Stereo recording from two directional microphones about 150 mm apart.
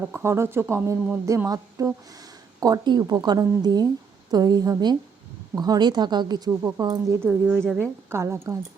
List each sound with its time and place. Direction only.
0.1 s a woman's voice: 15° right (ahead or behind)
7.6 s a woman's voice: 5° left (ahead or behind)
8.1 s a woman's voice: 20° right (ahead or behind)